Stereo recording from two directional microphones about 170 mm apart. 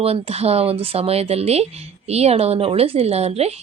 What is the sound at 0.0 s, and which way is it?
Speech, 35° right (ahead or behind).